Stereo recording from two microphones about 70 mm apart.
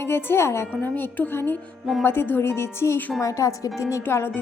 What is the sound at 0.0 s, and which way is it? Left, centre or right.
Speech, left.